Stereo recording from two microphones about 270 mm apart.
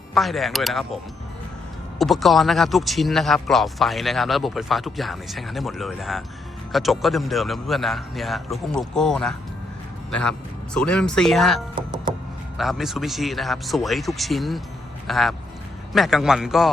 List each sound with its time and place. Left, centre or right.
0.1 s speech: centre
2.0 s speech: centre
11.7 s music: centre
12.5 s speech: centre